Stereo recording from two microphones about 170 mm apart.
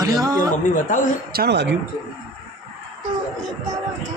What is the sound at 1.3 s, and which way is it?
Speech, 70° right (ahead or behind).